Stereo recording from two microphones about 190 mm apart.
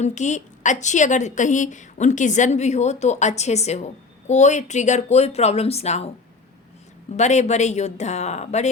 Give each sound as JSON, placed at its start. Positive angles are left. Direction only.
{"t": 0.0, "sound": "a woman's voice", "side_deg": 40}
{"t": 7.2, "sound": "a woman's voice", "side_deg": 35}